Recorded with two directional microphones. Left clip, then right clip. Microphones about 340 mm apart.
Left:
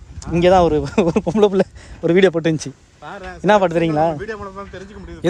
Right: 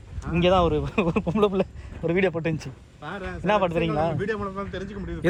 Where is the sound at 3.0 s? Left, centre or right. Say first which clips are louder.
Left 2 dB; centre.